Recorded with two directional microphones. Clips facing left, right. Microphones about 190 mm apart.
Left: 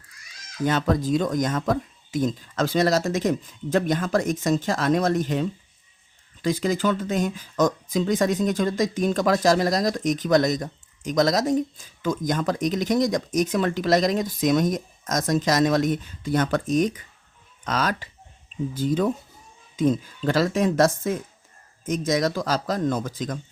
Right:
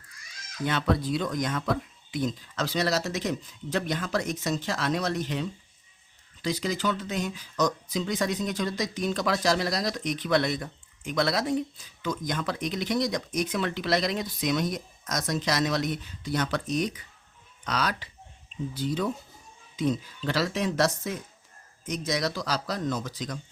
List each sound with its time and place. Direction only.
0.6 s speech: 45° left (ahead or behind)